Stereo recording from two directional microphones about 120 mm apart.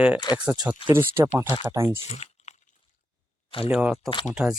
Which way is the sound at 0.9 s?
20° right (ahead or behind).